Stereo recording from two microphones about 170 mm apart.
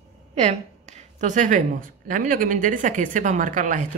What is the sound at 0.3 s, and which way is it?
Speech, 40° right (ahead or behind).